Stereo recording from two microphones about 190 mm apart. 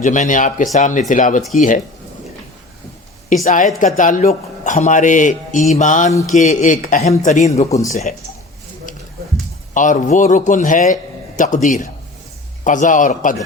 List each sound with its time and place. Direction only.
0.0 s a man's voice: 40° left (ahead or behind)
3.4 s a man's voice: 40° left (ahead or behind)
9.7 s a man's voice: 40° left (ahead or behind)